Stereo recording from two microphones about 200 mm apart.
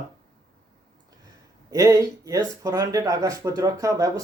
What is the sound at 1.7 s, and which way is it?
Speech, 15° right (ahead or behind).